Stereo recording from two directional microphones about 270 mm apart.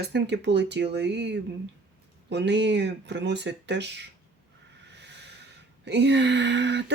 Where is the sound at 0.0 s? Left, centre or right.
Right.